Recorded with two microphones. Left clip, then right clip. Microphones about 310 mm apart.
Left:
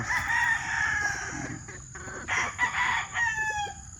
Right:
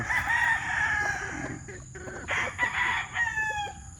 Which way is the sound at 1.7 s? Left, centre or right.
Left.